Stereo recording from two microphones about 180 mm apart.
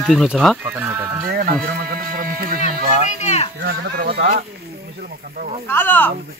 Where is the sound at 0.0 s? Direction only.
Centre (ahead or behind).